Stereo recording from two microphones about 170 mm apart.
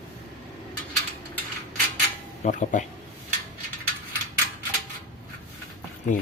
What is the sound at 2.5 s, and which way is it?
Speech, 45° left (ahead or behind).